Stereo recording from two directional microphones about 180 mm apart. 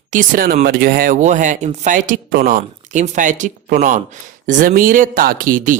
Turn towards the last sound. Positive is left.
turn(degrees=-50)  # may be behind; listen again after turning